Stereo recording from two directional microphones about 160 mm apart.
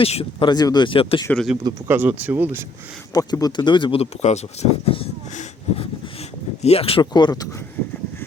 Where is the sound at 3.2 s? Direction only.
25° left (ahead or behind); by 4.9 s 45° left (ahead or behind).